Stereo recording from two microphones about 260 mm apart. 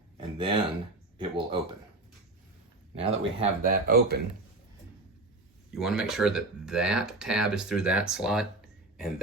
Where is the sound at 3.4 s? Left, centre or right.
Right.